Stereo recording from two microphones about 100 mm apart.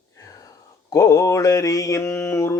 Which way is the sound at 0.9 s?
35° left (ahead or behind).